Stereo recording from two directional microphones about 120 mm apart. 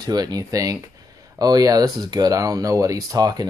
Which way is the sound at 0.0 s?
35° right (ahead or behind).